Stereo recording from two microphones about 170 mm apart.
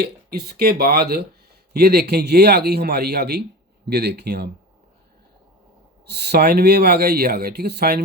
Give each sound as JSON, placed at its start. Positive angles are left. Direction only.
{"t": 0.0, "sound": "speech", "side_deg": -65}
{"t": 6.1, "sound": "speech", "side_deg": -75}